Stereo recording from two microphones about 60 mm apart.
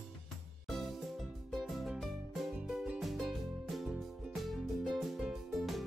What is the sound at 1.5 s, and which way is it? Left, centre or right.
Music, centre.